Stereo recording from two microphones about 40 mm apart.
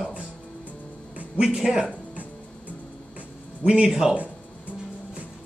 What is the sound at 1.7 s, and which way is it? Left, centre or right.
Speech, centre.